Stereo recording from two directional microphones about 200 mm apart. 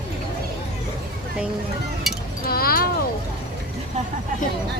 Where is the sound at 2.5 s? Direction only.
50° left (ahead or behind).